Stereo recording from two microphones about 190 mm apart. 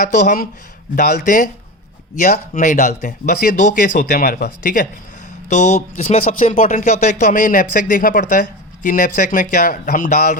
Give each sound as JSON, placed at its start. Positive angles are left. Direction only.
{"t": 0.0, "sound": "speech", "side_deg": 45}
{"t": 5.5, "sound": "speech", "side_deg": 40}